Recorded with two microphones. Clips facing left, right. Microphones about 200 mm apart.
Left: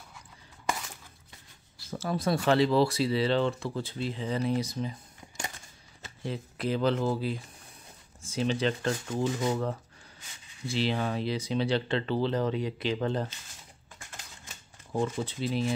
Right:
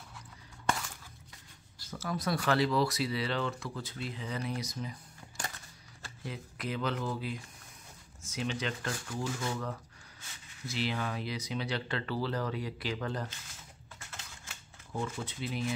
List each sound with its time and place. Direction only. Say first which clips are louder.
1.9 s speech: left 5 dB; 30° left (ahead or behind)
6.0 s speech: left 6 dB; 30° left (ahead or behind)
13.9 s typewriter: left 1 dB; 15° left (ahead or behind)
14.9 s speech: left 7 dB; 35° left (ahead or behind)